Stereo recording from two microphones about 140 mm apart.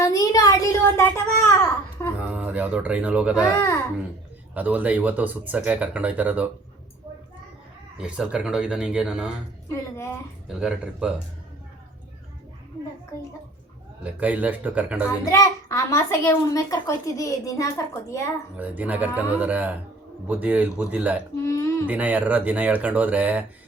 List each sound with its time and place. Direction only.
0.0 s a sound: 25° left (ahead or behind)
2.2 s speech: 10° right (ahead or behind)
4.5 s speech: 10° right (ahead or behind)
7.9 s speech: 5° right (ahead or behind)
9.7 s a child's voice: 20° left (ahead or behind)
10.5 s speech: 5° right (ahead or behind)
14.0 s speech: 10° right (ahead or behind)
15.2 s a child's voice: 25° left (ahead or behind)
18.5 s speech: 10° right (ahead or behind)
21.4 s a child's voice: 20° left (ahead or behind)
21.8 s speech: 10° right (ahead or behind)